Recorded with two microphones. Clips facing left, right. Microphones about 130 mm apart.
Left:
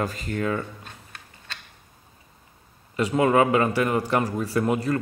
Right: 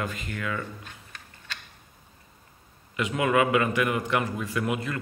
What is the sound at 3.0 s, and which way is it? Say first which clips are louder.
A man's voice: left 4 dB; 35° left (ahead or behind).